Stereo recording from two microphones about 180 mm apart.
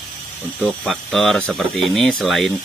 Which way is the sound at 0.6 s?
Centre (ahead or behind).